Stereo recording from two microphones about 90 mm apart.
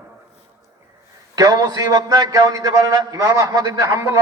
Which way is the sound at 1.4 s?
45° right (ahead or behind).